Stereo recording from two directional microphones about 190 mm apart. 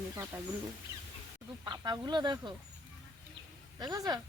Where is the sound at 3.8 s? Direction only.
20° right (ahead or behind).